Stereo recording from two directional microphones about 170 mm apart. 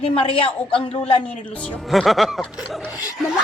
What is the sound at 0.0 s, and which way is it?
A woman's voice, 30° left (ahead or behind).